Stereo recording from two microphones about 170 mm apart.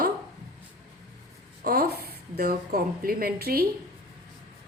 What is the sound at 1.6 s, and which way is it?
A woman's voice, 65° right (ahead or behind).